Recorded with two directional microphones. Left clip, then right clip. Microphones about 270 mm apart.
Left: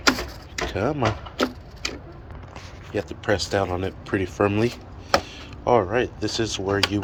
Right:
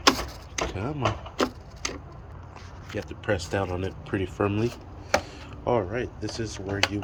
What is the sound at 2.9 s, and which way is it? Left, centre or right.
Speech, centre.